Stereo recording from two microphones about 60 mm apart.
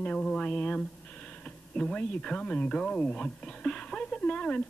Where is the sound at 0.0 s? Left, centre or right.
Left.